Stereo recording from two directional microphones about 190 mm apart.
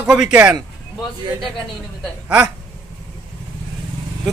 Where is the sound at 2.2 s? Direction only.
5° right (ahead or behind).